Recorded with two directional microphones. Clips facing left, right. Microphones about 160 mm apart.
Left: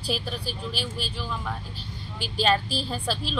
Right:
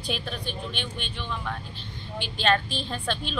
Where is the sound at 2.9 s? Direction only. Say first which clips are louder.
Right 1 dB; 5° left (ahead or behind).